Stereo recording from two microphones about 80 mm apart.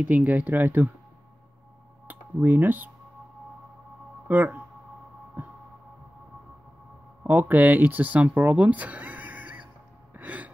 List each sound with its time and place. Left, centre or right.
0.0 s speech: right
2.0 s speech: right
4.3 s speech: right
5.4 s a sound: right
7.2 s speech: right
10.1 s gasp: centre